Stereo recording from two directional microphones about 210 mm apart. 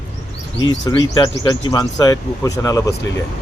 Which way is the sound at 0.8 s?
20° left (ahead or behind).